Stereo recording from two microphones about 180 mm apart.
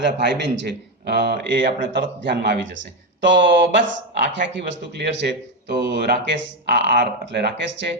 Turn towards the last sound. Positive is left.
turn(degrees=-75)  # may be behind; listen again after turning